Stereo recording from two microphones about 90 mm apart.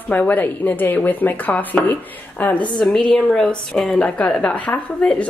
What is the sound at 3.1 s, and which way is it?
A woman's voice, 5° left (ahead or behind).